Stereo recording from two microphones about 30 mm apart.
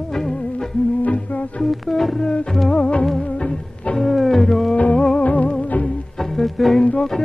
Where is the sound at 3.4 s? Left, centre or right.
Left.